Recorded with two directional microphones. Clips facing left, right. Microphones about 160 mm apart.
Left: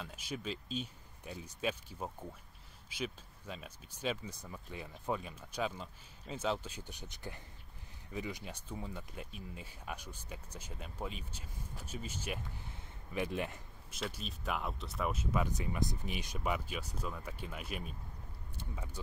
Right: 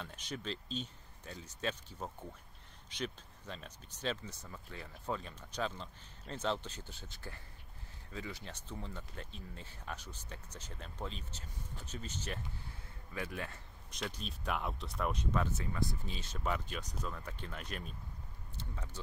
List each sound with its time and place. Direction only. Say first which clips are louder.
0.0 s speech: left 1 dB; 5° left (ahead or behind)
13.8 s speech: left 1 dB; 5° left (ahead or behind)